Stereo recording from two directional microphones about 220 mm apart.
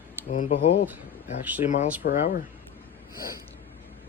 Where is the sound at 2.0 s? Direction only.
40° left (ahead or behind).